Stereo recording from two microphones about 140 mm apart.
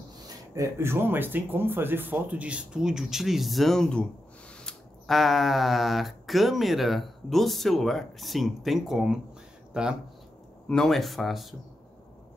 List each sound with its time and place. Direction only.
0.6 s speech: 20° right (ahead or behind); by 11.4 s centre (ahead or behind)